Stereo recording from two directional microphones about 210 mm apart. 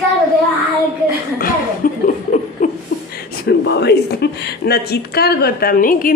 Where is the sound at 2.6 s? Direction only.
40° left (ahead or behind).